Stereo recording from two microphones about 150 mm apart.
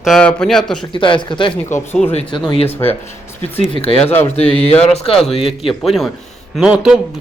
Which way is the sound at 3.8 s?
40° left (ahead or behind).